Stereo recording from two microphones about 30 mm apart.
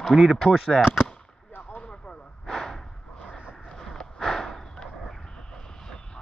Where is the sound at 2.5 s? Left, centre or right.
Centre.